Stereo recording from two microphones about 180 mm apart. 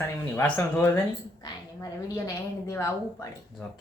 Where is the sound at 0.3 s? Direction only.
10° left (ahead or behind).